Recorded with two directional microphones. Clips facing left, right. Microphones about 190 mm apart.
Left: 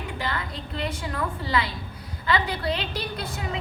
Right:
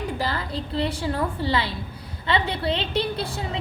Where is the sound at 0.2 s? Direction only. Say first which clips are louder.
Right 3 dB; 35° right (ahead or behind).